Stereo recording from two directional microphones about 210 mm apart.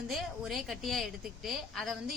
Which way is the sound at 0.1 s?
Centre (ahead or behind).